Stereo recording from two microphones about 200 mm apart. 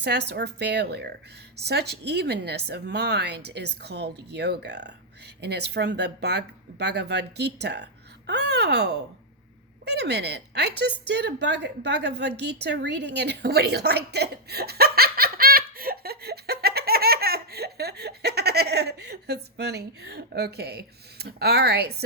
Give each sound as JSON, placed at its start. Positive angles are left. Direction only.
{"t": 0.0, "sound": "a woman's voice", "side_deg": -55}